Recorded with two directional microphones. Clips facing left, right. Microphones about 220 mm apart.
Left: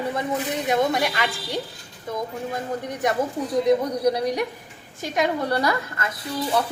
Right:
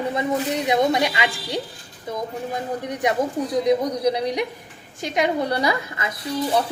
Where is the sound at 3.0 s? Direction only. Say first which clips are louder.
Right 2 dB; 15° right (ahead or behind).